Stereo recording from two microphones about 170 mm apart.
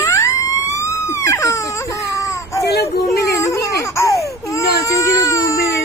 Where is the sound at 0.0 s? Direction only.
20° left (ahead or behind).